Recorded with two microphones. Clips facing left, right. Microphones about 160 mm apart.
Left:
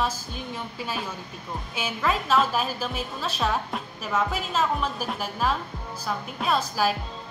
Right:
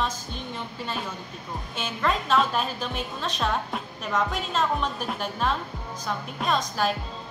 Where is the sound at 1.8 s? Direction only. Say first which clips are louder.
Even; 5° left (ahead or behind).